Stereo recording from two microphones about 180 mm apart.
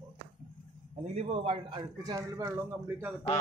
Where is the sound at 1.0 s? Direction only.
35° right (ahead or behind); by 2.5 s 20° right (ahead or behind).